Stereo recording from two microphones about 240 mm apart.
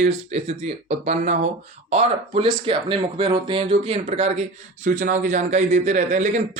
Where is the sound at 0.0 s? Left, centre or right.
Right.